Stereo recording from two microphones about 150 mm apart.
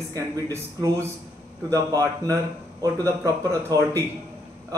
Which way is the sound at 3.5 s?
20° right (ahead or behind).